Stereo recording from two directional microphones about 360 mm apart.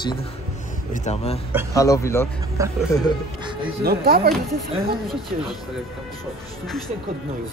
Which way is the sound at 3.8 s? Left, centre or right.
Right.